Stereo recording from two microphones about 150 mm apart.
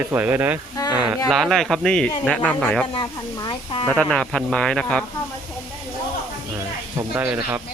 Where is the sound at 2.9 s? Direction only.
25° left (ahead or behind).